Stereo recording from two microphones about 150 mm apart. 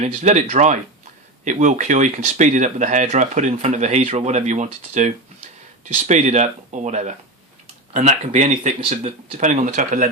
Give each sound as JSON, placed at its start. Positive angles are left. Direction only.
{"t": 0.0, "sound": "speech", "side_deg": -50}